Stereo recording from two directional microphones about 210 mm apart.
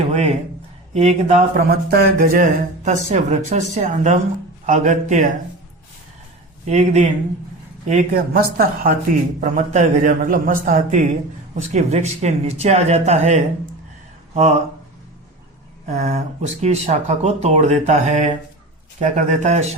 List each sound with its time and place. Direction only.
0.1 s a man's voice: 30° right (ahead or behind)
6.7 s speech: 35° right (ahead or behind)
15.9 s speech: 30° right (ahead or behind)